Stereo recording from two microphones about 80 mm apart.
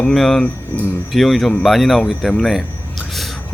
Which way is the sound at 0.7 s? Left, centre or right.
Centre.